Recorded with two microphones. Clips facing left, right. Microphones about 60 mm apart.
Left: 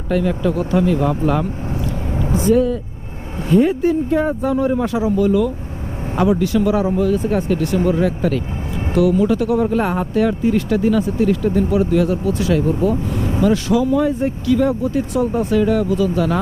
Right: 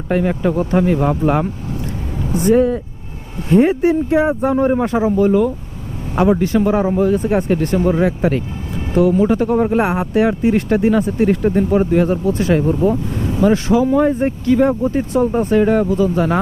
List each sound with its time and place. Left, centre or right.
0.1 s speech: right
4.5 s speech: right
7.2 s speech: right
10.2 s speech: right